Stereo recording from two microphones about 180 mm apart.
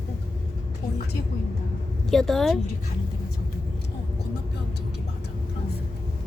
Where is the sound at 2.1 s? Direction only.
Centre (ahead or behind).